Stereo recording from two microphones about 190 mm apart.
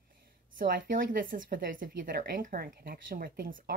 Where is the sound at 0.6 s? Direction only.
45° right (ahead or behind).